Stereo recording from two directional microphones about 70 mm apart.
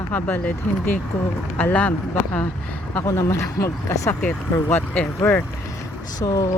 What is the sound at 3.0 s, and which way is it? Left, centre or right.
Speech, left.